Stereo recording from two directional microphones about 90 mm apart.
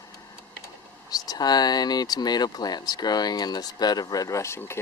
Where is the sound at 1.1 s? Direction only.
45° left (ahead or behind).